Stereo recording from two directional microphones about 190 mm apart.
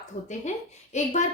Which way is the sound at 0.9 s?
40° left (ahead or behind).